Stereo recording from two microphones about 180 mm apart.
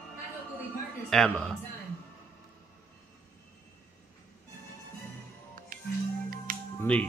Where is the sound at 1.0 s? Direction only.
5° left (ahead or behind).